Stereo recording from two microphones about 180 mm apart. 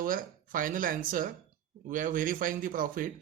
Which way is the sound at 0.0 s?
50° right (ahead or behind).